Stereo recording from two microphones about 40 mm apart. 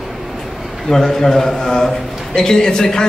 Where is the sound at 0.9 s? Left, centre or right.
Centre.